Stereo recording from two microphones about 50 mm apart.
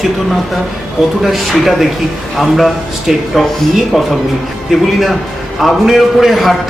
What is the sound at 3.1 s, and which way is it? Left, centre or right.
A man's voice, centre.